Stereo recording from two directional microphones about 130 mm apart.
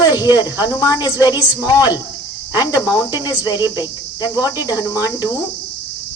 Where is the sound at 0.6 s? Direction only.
30° left (ahead or behind).